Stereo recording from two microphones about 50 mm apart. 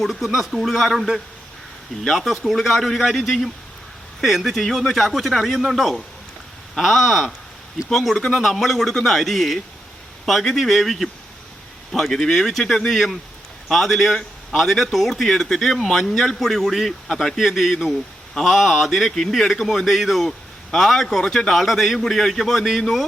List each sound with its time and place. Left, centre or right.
0.0 s a man's voice: centre